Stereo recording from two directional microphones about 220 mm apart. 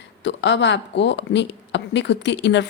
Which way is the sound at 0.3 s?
55° left (ahead or behind).